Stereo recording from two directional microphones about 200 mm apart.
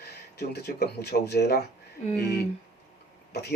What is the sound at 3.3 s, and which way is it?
Speech, 55° left (ahead or behind).